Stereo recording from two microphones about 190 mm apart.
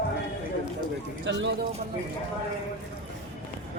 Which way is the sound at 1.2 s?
70° right (ahead or behind).